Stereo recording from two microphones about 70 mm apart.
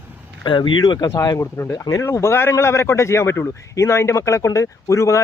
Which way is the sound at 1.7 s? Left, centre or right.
Left.